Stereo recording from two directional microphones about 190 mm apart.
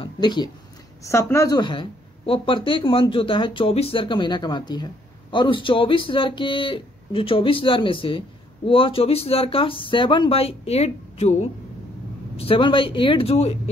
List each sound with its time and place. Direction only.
0.0 s a woman's voice: 25° left (ahead or behind)
12.4 s a woman's voice: 25° left (ahead or behind)